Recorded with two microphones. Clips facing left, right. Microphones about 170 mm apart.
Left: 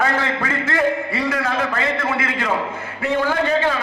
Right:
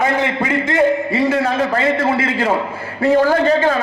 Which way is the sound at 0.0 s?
20° right (ahead or behind).